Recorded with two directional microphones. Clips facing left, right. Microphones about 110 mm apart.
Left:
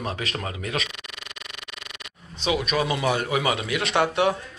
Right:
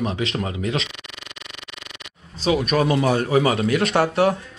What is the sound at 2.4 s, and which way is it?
Speech, 40° right (ahead or behind).